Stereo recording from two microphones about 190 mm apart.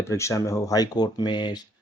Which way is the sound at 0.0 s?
15° left (ahead or behind).